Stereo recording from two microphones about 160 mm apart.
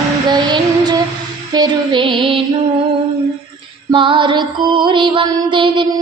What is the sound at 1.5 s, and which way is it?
Music, 30° right (ahead or behind).